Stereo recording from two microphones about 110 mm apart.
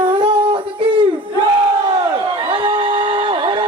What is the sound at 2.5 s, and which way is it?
Music, 50° right (ahead or behind).